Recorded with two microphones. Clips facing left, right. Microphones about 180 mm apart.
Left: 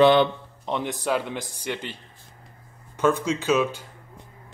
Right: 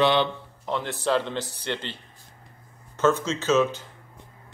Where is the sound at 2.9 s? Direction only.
10° left (ahead or behind).